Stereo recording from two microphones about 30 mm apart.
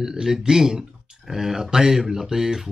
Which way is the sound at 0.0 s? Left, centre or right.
Centre.